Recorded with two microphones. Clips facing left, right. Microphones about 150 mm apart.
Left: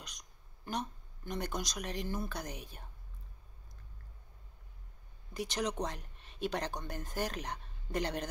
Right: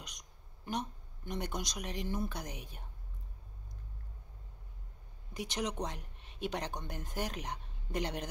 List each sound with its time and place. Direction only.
0.7 s speech: 20° right (ahead or behind)
5.3 s speech: 20° right (ahead or behind)